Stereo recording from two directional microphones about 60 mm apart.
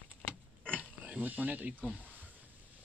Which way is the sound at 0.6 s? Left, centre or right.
Left.